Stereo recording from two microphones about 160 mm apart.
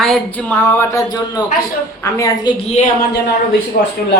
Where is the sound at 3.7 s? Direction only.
65° left (ahead or behind).